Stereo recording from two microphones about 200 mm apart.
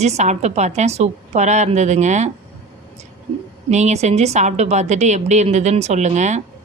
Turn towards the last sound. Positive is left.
turn(degrees=-35)  # may be behind; listen again after turning